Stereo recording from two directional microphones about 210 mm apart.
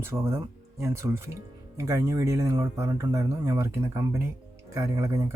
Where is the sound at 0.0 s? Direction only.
10° right (ahead or behind).